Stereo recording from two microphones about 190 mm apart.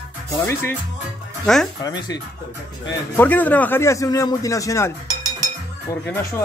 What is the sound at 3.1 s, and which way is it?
Speech, 10° left (ahead or behind).